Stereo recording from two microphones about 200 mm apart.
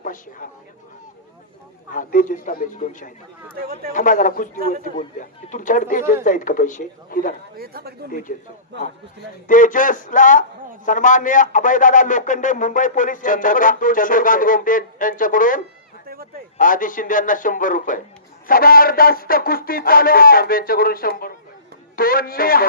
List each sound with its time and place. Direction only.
0.0 s speech: 40° left (ahead or behind)
1.9 s a man's voice: 45° left (ahead or behind)
7.5 s speech: 50° right (ahead or behind)
8.3 s speech: 40° left (ahead or behind)
9.5 s a man's voice: 40° left (ahead or behind)